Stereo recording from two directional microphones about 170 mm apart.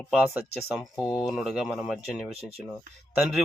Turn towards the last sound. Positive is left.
turn(degrees=0)  # may be behind; listen again after turning